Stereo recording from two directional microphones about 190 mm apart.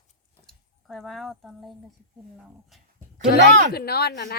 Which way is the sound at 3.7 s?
55° left (ahead or behind).